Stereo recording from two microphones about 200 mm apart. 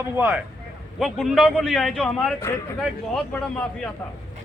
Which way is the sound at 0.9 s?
Centre (ahead or behind).